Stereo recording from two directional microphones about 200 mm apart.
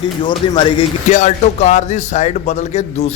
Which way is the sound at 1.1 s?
35° left (ahead or behind).